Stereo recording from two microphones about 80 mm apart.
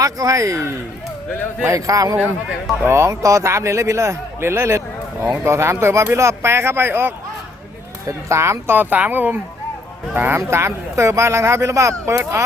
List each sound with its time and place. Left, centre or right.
0.0 s speech: right
1.6 s speech: right